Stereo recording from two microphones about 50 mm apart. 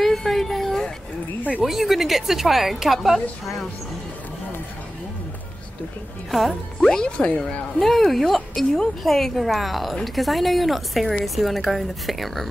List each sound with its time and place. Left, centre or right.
0.0 s a sound: centre
1.6 s a woman's voice: centre
6.3 s a woman's voice: centre
7.1 s speech: left
7.8 s a woman's voice: centre